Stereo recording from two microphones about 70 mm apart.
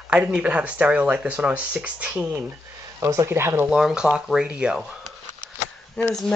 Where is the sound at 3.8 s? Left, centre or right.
Centre.